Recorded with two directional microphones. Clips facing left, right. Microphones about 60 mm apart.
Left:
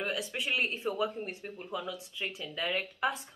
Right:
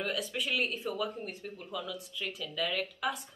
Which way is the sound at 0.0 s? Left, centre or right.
Left.